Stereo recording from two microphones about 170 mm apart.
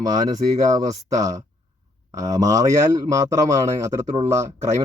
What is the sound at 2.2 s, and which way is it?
Speech, 20° right (ahead or behind).